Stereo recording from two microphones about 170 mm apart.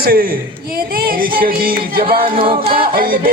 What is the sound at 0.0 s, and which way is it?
Music, 60° right (ahead or behind).